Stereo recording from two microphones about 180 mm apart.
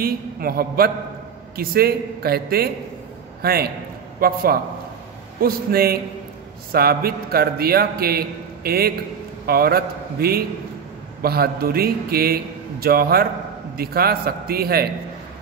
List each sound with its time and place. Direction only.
0.0 s a man's voice: 55° right (ahead or behind)